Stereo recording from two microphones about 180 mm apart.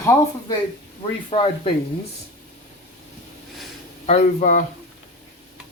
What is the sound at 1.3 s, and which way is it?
Speech, 30° left (ahead or behind).